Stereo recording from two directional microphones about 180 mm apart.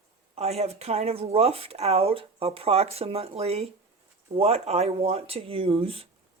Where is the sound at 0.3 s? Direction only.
35° right (ahead or behind).